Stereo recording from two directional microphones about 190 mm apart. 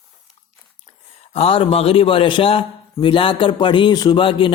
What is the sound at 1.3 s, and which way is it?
A man's voice, 30° left (ahead or behind).